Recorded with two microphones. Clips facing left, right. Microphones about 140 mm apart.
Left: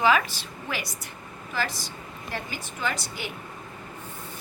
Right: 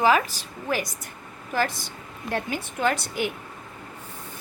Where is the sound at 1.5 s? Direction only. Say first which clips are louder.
Right 5 dB; 55° right (ahead or behind).